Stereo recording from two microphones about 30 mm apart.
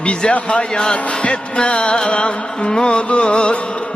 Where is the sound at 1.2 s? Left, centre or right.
Left.